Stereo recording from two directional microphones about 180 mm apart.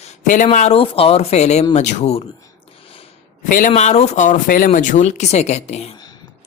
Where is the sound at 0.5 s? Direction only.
35° left (ahead or behind).